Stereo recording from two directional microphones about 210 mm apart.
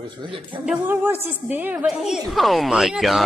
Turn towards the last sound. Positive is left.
turn(degrees=0)  # may be behind; listen again after turning